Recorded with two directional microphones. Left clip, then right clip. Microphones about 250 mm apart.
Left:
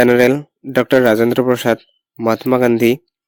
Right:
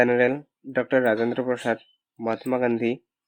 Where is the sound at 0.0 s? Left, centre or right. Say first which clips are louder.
Left 9 dB; left.